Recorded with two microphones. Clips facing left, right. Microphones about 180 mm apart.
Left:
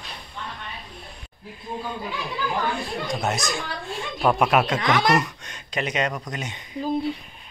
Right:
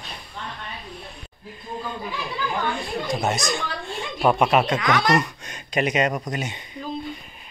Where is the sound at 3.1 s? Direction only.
Centre (ahead or behind).